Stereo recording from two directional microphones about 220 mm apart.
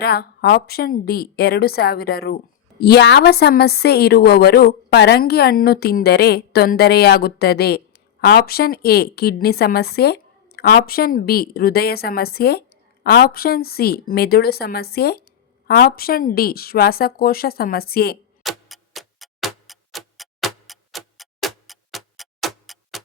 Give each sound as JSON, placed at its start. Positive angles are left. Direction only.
{"t": 0.0, "sound": "a woman's voice", "side_deg": 45}
{"t": 18.4, "sound": "tick-tock", "side_deg": 0}